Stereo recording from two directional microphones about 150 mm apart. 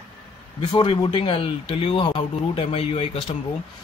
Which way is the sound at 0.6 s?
35° left (ahead or behind).